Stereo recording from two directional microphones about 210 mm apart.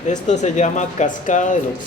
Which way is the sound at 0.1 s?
35° left (ahead or behind).